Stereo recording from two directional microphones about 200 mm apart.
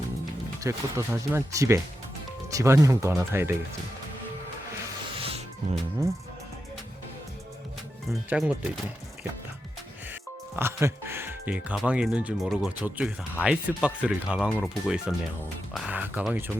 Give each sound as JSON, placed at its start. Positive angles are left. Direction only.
{"t": 0.6, "sound": "speech", "side_deg": -15}
{"t": 5.1, "sound": "music", "side_deg": -25}
{"t": 8.3, "sound": "speech", "side_deg": -5}
{"t": 10.5, "sound": "speech", "side_deg": -10}